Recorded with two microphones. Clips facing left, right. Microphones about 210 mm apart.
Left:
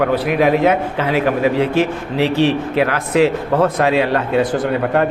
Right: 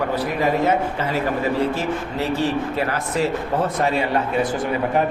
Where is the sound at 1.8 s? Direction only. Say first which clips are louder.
Left 7 dB; 90° left.